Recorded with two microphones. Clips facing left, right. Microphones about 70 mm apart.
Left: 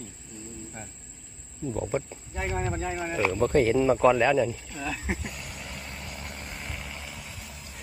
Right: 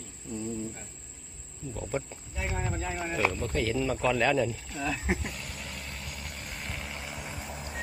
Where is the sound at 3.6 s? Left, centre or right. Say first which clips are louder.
Left 5 dB; left.